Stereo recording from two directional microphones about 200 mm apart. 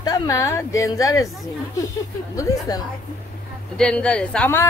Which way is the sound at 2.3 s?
15° left (ahead or behind).